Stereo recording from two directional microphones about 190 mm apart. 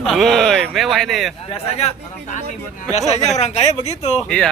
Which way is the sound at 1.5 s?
35° left (ahead or behind).